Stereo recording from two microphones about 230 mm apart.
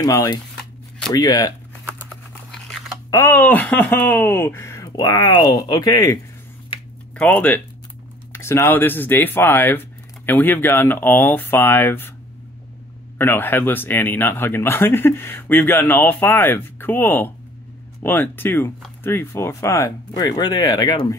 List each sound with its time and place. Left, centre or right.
0.0 s a man's voice: centre
3.1 s a man's voice: centre
7.2 s a man's voice: centre
13.2 s a man's voice: centre